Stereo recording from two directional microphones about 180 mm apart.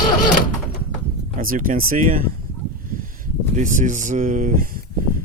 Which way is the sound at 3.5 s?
45° right (ahead or behind).